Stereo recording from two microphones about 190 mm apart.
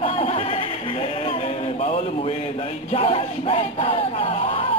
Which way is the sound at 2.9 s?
30° left (ahead or behind).